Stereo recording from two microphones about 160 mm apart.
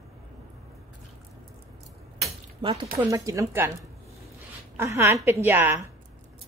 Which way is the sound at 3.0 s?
20° right (ahead or behind).